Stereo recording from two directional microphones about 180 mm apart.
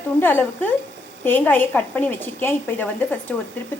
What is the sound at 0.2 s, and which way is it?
A woman's voice, 10° left (ahead or behind).